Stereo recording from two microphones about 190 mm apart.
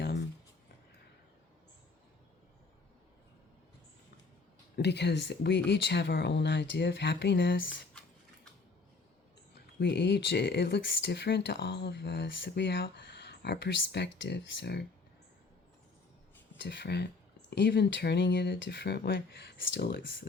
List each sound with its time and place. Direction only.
4.8 s speech: 60° left (ahead or behind)
9.8 s speech: 65° left (ahead or behind)
16.6 s speech: 65° left (ahead or behind)